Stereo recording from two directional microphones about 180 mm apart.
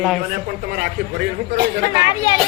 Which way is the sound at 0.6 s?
60° right (ahead or behind).